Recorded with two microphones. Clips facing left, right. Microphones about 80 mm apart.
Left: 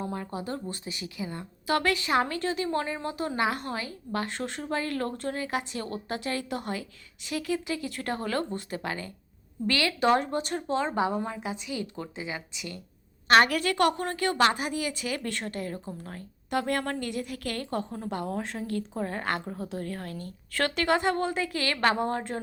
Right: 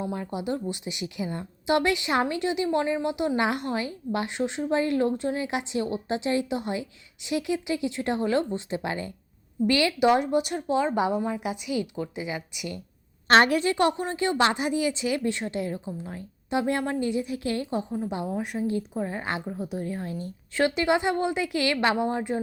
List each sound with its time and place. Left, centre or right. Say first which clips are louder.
0.0 s a woman's voice: right 3 dB; centre